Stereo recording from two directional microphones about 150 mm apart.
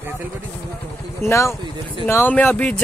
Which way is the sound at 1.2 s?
20° left (ahead or behind).